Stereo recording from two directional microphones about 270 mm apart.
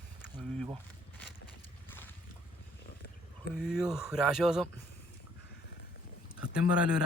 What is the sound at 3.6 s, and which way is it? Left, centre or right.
Speech, centre.